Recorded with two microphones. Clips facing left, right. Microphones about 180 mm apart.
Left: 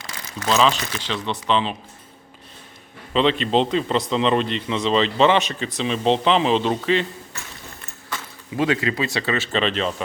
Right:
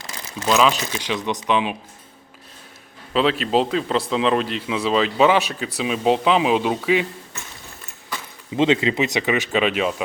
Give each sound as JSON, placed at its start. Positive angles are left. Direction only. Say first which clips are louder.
{"t": 0.4, "sound": "speech", "louder": "right 1 dB", "side_deg": -10}
{"t": 3.1, "sound": "speech", "louder": "even", "side_deg": -5}
{"t": 8.1, "sound": "speech", "louder": "right 2 dB", "side_deg": -20}